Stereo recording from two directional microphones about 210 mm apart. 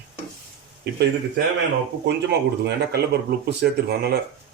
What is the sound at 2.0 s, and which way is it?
Speech, 55° right (ahead or behind).